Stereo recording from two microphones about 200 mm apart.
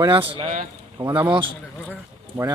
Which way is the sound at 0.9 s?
15° right (ahead or behind).